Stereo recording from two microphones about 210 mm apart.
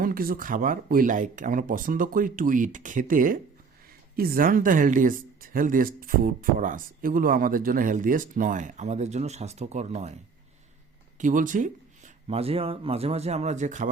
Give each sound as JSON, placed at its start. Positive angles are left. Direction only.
{"t": 0.0, "sound": "speech", "side_deg": -45}
{"t": 11.2, "sound": "speech", "side_deg": -40}